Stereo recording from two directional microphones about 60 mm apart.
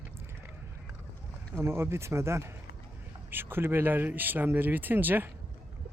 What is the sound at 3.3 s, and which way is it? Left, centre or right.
Speech, right.